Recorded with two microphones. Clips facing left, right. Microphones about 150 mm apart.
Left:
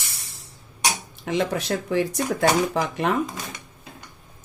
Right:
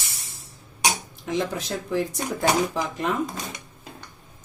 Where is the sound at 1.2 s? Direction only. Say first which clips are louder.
Left 3 dB; 75° left (ahead or behind).